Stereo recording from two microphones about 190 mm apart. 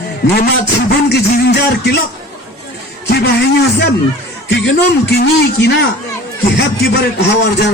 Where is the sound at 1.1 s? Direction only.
60° left (ahead or behind).